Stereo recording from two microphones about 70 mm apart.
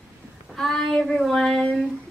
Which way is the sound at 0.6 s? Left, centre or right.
Centre.